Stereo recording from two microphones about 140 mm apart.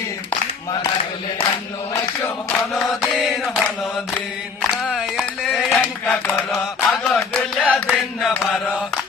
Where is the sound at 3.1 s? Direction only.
Centre (ahead or behind).